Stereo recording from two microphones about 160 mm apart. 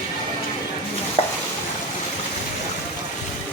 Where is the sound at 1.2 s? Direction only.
35° left (ahead or behind).